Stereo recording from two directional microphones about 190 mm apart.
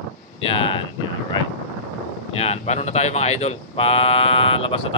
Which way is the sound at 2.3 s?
35° left (ahead or behind).